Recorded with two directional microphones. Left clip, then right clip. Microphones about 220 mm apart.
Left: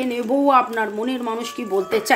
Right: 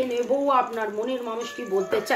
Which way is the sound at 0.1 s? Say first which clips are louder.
Left 8 dB; 50° left (ahead or behind).